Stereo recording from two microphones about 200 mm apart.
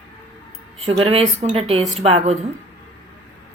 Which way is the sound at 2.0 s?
30° right (ahead or behind).